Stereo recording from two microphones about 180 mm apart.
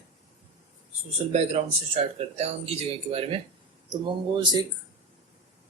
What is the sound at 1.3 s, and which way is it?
Speech, 35° right (ahead or behind).